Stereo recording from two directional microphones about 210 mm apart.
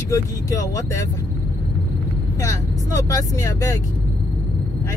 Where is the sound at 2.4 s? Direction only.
15° left (ahead or behind).